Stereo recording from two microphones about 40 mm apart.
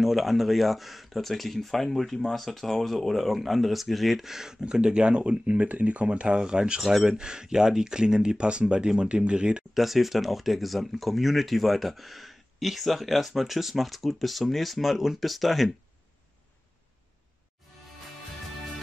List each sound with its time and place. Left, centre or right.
0.0 s speech: centre
4.3 s speech: centre
6.8 s speech: centre
7.1 s speech: centre
9.8 s speech: centre